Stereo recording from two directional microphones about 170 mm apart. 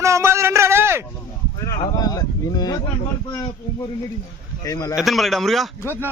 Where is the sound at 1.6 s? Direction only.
20° left (ahead or behind).